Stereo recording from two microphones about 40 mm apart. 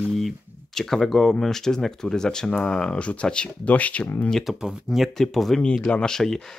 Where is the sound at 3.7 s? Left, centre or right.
Left.